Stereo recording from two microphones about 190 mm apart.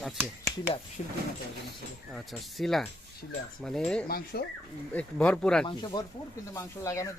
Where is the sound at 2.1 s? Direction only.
Centre (ahead or behind).